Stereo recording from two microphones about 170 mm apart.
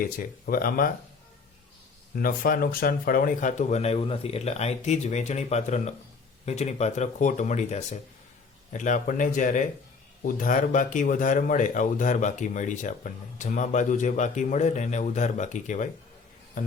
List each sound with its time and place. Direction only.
0.0 s speech: 60° left (ahead or behind)
2.1 s speech: 60° left (ahead or behind)